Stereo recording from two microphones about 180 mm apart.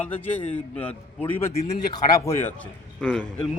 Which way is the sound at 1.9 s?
20° left (ahead or behind).